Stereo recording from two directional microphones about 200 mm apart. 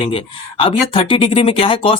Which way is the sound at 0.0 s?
25° left (ahead or behind).